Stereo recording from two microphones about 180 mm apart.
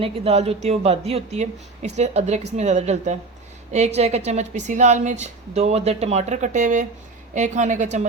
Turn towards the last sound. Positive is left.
turn(degrees=-45)  # may be behind; listen again after turning